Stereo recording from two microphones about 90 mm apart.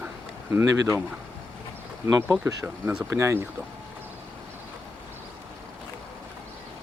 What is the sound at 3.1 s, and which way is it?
Speech, 30° right (ahead or behind).